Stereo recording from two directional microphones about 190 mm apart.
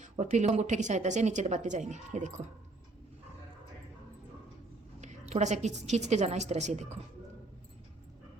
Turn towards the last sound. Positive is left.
turn(degrees=-35)  # may be behind; listen again after turning